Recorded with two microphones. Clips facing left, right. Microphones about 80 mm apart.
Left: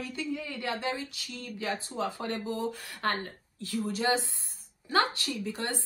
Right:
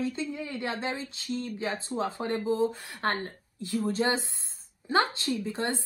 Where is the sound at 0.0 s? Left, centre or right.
Right.